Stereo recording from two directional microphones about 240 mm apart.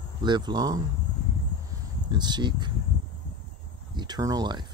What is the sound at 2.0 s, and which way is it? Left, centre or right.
Speech, centre.